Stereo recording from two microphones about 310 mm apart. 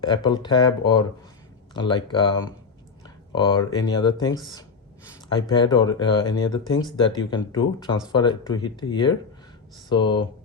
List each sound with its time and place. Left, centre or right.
0.0 s speech: centre
5.4 s speech: centre